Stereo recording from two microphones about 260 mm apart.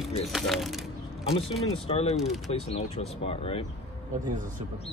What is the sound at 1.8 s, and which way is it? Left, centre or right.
Speech, left.